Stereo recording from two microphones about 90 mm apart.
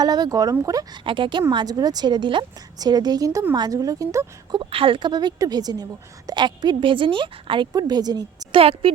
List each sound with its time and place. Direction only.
0.0 s a woman's voice: 45° right (ahead or behind)
1.0 s speech: 65° right (ahead or behind)
2.7 s a woman's voice: 50° right (ahead or behind)
4.5 s a woman's voice: 80° right
7.7 s a woman's voice: 50° right (ahead or behind)
8.5 s a woman's voice: 90° right